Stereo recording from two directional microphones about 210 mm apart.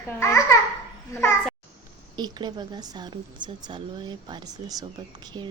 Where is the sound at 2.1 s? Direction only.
20° right (ahead or behind).